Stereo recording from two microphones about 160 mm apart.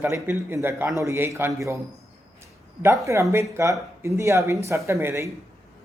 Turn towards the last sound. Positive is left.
turn(degrees=-15)  # may be behind; listen again after turning